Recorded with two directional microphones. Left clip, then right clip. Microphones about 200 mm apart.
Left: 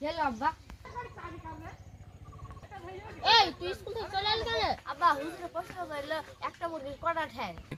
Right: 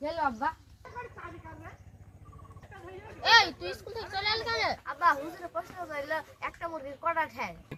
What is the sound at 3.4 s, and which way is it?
Speech, 25° left (ahead or behind).